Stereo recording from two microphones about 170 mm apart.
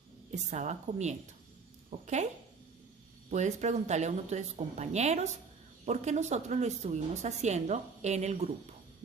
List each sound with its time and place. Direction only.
0.3 s a woman's voice: 45° right (ahead or behind)
3.3 s a woman's voice: 45° right (ahead or behind)